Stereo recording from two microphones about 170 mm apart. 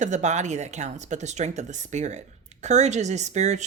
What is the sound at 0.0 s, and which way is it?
Speech, 45° right (ahead or behind).